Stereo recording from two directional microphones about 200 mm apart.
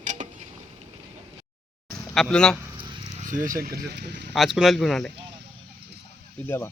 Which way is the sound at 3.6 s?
50° right (ahead or behind).